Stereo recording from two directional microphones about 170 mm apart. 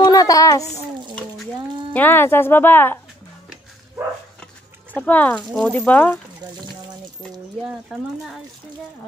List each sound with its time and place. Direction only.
0.0 s a sound: 20° left (ahead or behind)
2.0 s speech: 10° left (ahead or behind)
4.9 s speech: 10° left (ahead or behind)